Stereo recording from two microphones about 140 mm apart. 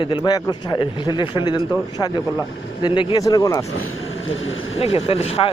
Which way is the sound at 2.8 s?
35° left (ahead or behind).